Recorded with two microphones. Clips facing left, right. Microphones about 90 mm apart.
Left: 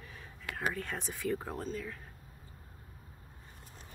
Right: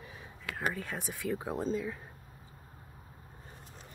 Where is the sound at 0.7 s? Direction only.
5° right (ahead or behind).